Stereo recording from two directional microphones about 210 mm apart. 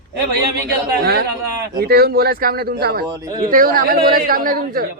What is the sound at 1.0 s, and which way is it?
A woman's voice, 50° right (ahead or behind).